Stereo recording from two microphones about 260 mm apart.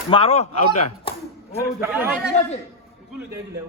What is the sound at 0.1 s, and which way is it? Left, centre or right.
Speech, left.